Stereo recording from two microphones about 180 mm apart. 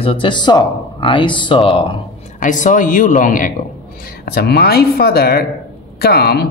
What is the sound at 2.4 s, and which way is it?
Speech, 45° left (ahead or behind).